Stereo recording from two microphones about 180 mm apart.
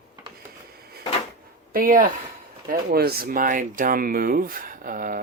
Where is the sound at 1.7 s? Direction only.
50° right (ahead or behind).